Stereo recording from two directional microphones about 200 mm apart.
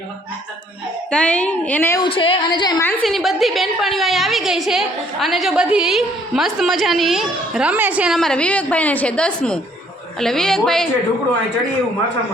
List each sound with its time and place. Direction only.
1.1 s a woman's voice: 5° left (ahead or behind)
2.0 s a woman's voice: 25° left (ahead or behind)
2.8 s a woman's voice: centre (ahead or behind)